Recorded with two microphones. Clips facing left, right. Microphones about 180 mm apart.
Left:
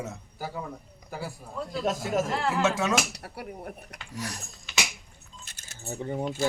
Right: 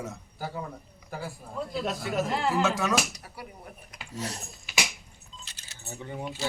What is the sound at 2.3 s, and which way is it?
Speech, centre (ahead or behind).